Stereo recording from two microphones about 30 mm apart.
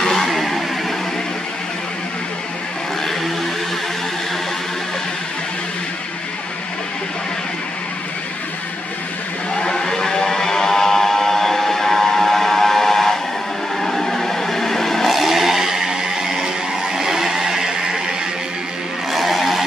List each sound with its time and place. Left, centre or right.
0.0 s vehicle: centre
0.3 s vehicle: centre
9.6 s a sound: left
13.7 s vehicle: centre
15.0 s vehicle: centre
15.9 s music: centre
16.9 s vehicle: centre
19.1 s a sound: centre